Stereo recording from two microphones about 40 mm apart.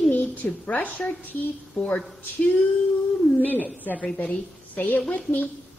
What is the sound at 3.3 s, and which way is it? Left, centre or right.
A woman's voice, left.